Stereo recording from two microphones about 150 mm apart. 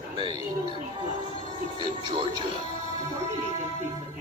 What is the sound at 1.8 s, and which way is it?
Television, 30° right (ahead or behind).